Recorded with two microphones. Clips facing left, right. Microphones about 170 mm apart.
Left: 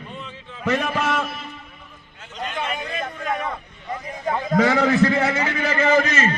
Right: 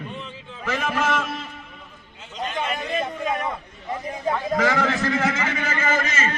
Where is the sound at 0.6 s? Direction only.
65° left (ahead or behind).